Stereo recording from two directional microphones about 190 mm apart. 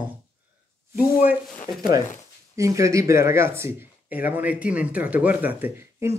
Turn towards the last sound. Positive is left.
turn(degrees=-10)  # may be behind; listen again after turning